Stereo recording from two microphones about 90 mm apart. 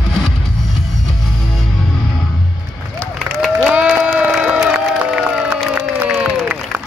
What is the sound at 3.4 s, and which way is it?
Crowd, 10° right (ahead or behind).